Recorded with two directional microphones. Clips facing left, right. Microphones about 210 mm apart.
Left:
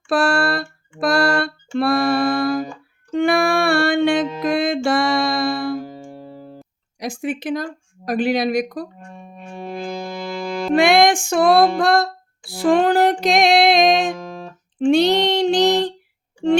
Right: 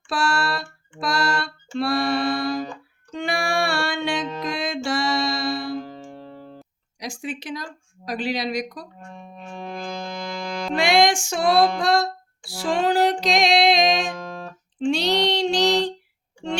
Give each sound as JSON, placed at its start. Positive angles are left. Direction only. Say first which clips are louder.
{"t": 0.1, "sound": "a sound", "louder": "left 6 dB", "side_deg": 55}
{"t": 3.1, "sound": "music", "louder": "left 9 dB", "side_deg": 55}
{"t": 5.8, "sound": "music", "louder": "left 3 dB", "side_deg": 5}
{"t": 7.0, "sound": "speech", "louder": "left 7 dB", "side_deg": 55}
{"t": 9.1, "sound": "music", "louder": "left 1 dB", "side_deg": 5}
{"t": 10.8, "sound": "music", "louder": "left 4 dB", "side_deg": 55}
{"t": 14.1, "sound": "music", "louder": "left 4 dB", "side_deg": 5}
{"t": 14.8, "sound": "speech", "louder": "left 6 dB", "side_deg": 55}
{"t": 16.4, "sound": "music", "louder": "left 11 dB", "side_deg": 55}